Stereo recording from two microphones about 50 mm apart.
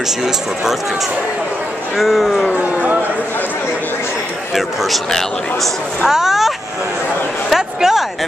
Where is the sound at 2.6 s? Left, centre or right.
Right.